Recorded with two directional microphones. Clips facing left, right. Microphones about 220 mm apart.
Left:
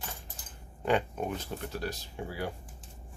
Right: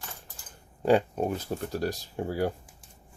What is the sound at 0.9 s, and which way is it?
Speech, 35° right (ahead or behind).